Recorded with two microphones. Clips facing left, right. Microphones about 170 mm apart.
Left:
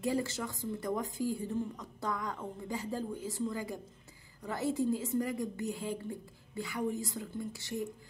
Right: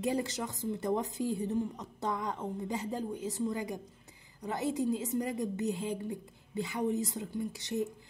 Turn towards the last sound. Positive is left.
turn(degrees=-20)  # may be behind; listen again after turning